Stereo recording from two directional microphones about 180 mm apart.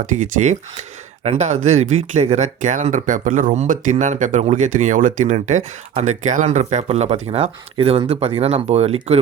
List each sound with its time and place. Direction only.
0.0 s speech: 45° right (ahead or behind)